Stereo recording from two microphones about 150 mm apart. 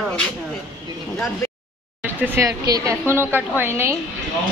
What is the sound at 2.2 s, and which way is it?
A woman's voice, 15° right (ahead or behind).